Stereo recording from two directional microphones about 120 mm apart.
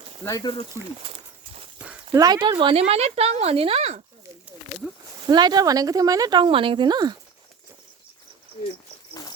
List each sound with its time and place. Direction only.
0.3 s speech: 30° left (ahead or behind)
1.0 s a sound: 55° right (ahead or behind)
2.1 s speech: 35° right (ahead or behind); by 4.0 s 60° right (ahead or behind)
5.2 s speech: 35° right (ahead or behind)